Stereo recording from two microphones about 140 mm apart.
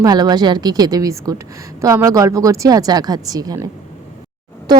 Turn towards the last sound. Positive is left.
turn(degrees=-30)  # may be behind; listen again after turning